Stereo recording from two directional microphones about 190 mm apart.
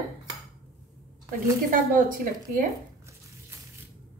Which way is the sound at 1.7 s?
45° right (ahead or behind).